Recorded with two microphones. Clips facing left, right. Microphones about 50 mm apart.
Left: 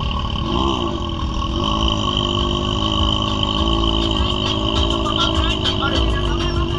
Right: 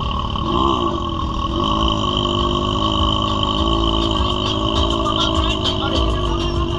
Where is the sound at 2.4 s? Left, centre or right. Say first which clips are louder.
Right 2 dB; left.